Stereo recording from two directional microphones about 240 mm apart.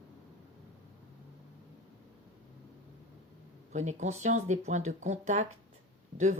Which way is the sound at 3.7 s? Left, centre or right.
Right.